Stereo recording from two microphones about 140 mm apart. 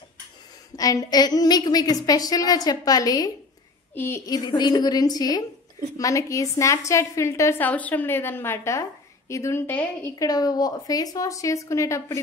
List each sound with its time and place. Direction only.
0.7 s a woman's voice: 25° left (ahead or behind)
3.9 s a woman's voice: 15° left (ahead or behind)
4.3 s a woman's voice: 30° left (ahead or behind); by 10.1 s 15° left (ahead or behind)
10.1 s a woman's voice: 25° left (ahead or behind)